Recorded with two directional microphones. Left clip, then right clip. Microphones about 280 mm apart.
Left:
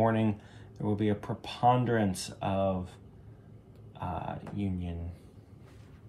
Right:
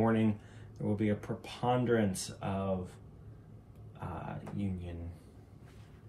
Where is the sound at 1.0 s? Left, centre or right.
Left.